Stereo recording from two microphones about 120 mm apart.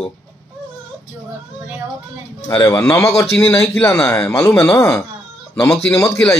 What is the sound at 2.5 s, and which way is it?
Speech, 30° left (ahead or behind).